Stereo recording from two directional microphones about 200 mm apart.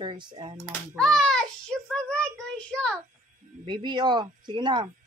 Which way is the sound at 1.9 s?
5° left (ahead or behind).